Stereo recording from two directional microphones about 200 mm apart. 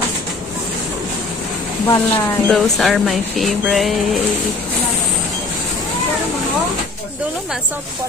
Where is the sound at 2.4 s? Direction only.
Centre (ahead or behind).